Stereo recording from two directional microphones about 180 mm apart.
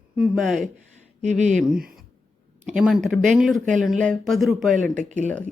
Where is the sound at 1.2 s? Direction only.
40° right (ahead or behind).